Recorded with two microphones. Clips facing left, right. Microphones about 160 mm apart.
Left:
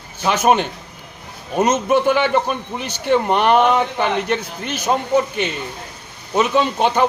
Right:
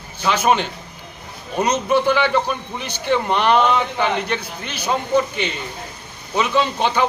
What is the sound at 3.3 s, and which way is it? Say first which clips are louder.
A man's voice: left 1 dB; 45° left (ahead or behind).